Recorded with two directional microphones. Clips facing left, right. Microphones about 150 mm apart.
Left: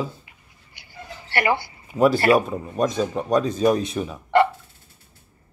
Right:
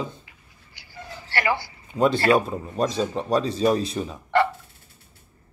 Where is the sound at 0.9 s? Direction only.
20° left (ahead or behind).